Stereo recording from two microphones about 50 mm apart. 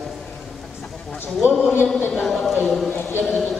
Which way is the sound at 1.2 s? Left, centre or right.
Left.